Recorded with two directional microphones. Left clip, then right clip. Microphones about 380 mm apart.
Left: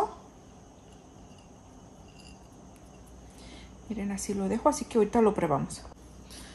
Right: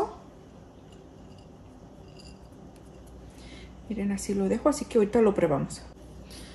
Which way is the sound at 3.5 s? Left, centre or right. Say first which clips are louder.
Right 3 dB; left.